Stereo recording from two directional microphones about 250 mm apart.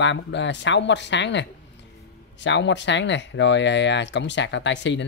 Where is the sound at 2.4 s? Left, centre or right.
Left.